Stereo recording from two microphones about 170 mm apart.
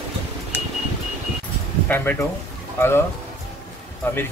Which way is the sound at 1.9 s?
10° left (ahead or behind).